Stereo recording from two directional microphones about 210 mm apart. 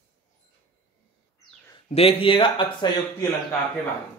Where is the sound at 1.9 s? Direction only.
25° left (ahead or behind).